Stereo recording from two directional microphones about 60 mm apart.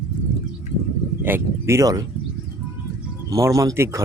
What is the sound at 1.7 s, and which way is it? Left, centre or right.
Speech, right.